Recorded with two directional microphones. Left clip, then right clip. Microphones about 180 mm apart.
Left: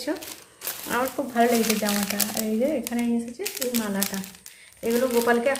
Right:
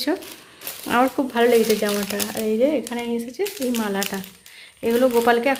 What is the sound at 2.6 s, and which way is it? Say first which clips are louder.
Speech: right 3 dB; 50° right (ahead or behind).